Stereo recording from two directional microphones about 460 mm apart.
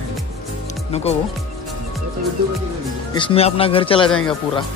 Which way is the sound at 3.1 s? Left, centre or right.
Centre.